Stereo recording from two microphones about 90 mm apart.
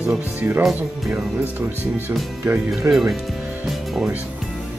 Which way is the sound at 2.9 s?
5° right (ahead or behind).